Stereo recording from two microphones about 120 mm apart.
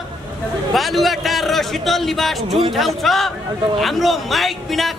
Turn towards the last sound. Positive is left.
turn(degrees=0)  # may be behind; listen again after turning